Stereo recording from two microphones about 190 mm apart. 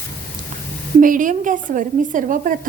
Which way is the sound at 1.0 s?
45° right (ahead or behind).